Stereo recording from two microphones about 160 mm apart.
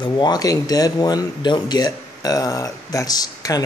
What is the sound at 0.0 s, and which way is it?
Speech, 25° left (ahead or behind).